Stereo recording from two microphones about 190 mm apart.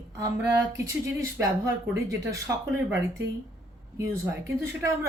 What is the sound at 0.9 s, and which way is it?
A woman's voice, 15° right (ahead or behind).